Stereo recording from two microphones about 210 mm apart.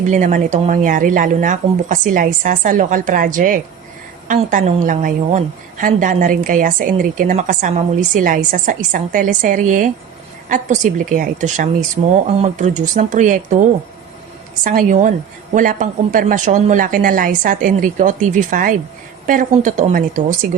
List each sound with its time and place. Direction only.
0.0 s a woman's voice: 35° right (ahead or behind)